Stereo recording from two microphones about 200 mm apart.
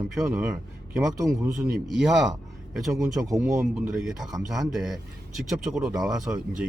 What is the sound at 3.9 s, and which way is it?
Speech, centre (ahead or behind).